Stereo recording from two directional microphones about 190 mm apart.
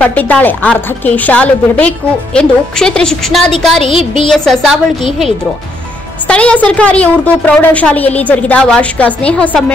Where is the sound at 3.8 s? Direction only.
30° left (ahead or behind).